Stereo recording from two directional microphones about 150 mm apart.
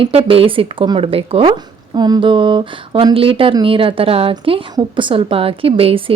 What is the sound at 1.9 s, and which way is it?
Speech, 30° right (ahead or behind).